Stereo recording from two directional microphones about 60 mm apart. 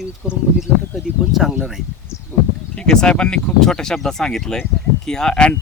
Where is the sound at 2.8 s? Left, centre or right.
Centre.